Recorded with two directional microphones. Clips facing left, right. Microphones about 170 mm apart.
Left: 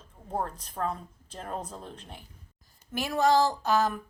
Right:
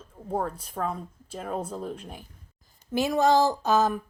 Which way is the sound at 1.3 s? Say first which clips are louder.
Right 5 dB; 5° right (ahead or behind).